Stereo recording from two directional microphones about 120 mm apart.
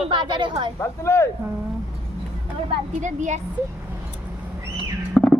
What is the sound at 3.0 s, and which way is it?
Speech, 90° right.